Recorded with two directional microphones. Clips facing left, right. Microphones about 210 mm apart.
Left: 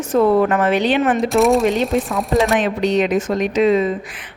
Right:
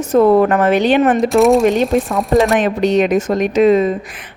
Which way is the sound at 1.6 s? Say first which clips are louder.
Right 4 dB; 50° right (ahead or behind).